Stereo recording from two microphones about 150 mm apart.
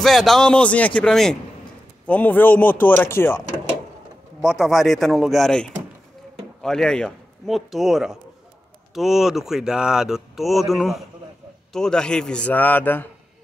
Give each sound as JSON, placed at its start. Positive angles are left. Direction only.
{"t": 0.0, "sound": "speech", "side_deg": 0}
{"t": 4.4, "sound": "speech", "side_deg": 0}